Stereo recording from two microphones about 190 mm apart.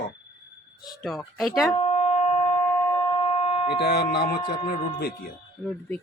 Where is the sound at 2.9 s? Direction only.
30° left (ahead or behind).